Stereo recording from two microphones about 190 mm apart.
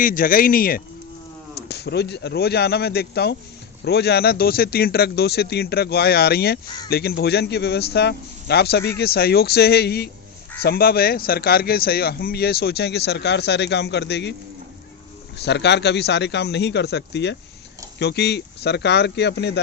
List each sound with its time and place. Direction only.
0.0 s a man's voice: 50° left (ahead or behind); by 14.3 s 65° left (ahead or behind)
15.4 s a man's voice: 60° left (ahead or behind)